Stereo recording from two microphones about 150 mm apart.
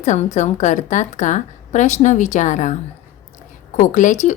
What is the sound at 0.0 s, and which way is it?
A woman's voice, 50° left (ahead or behind).